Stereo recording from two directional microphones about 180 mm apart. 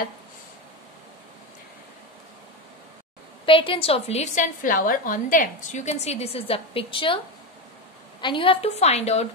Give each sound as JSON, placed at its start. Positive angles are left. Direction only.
{"t": 3.4, "sound": "a woman's voice", "side_deg": 30}
{"t": 8.2, "sound": "a woman's voice", "side_deg": 25}